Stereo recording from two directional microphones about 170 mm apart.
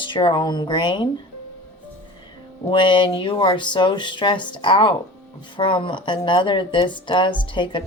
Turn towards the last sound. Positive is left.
turn(degrees=30)  # may be behind; listen again after turning